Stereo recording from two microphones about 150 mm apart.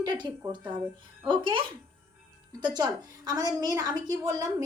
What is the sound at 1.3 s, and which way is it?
A woman's voice, 35° right (ahead or behind).